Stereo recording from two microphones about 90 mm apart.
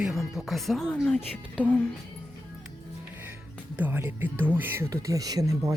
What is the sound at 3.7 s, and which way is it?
Speech, 20° right (ahead or behind).